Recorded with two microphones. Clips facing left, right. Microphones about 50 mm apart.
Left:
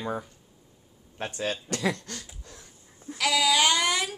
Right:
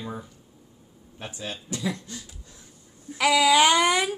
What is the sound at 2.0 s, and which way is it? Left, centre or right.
Wheeze, left.